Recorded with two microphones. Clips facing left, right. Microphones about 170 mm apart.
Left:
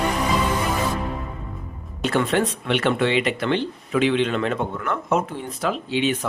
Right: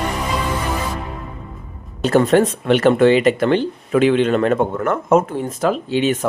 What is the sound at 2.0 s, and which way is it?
Speech, 40° right (ahead or behind).